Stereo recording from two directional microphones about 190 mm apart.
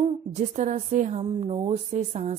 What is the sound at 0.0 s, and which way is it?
A woman's voice, 35° right (ahead or behind).